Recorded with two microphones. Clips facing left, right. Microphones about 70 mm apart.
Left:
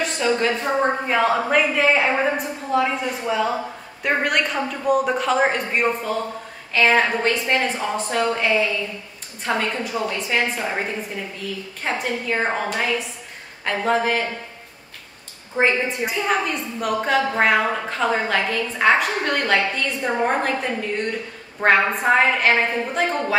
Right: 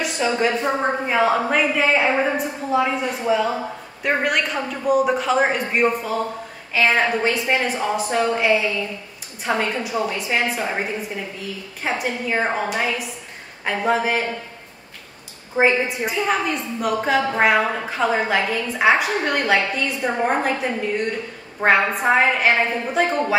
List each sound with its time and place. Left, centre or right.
0.0 s a woman's voice: centre
9.4 s a woman's voice: centre
11.8 s a woman's voice: centre
15.5 s a woman's voice: centre